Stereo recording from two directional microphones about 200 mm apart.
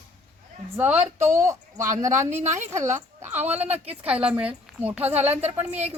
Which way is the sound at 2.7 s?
15° right (ahead or behind).